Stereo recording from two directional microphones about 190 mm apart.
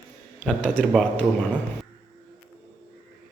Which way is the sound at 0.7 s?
5° left (ahead or behind).